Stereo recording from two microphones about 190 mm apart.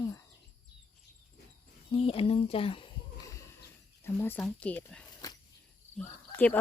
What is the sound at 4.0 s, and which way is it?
Speech, 10° left (ahead or behind).